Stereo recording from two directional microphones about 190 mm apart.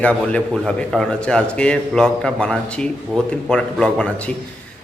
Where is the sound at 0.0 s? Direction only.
5° left (ahead or behind).